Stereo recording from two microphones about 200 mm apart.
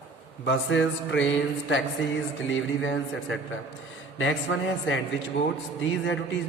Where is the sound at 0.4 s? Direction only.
70° left (ahead or behind).